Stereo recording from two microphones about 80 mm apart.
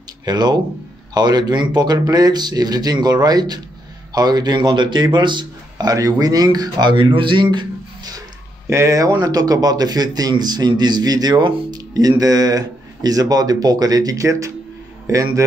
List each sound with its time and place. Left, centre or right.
0.2 s a man's voice: right
8.6 s speech: right
9.1 s speech: right